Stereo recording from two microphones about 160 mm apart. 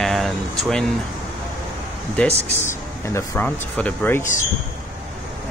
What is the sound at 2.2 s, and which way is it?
Speech, 10° left (ahead or behind).